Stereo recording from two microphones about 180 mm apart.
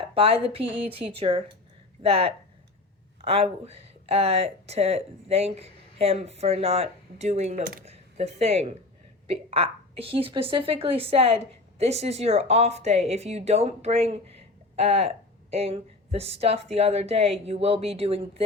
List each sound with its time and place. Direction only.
0.0 s a woman's voice: 30° right (ahead or behind); by 7.9 s 50° right (ahead or behind)
7.9 s a woman's voice: 35° right (ahead or behind)